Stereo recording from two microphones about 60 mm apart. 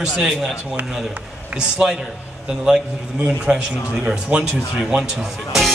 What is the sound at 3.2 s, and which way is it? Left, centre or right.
A man's voice, centre.